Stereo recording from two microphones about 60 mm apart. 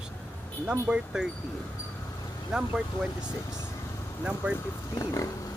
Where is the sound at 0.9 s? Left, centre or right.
Centre.